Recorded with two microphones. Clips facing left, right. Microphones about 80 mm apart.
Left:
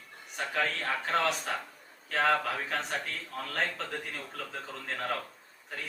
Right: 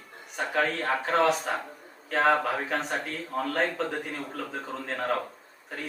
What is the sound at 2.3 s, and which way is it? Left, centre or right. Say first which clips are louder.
A man's voice: right 4 dB; right.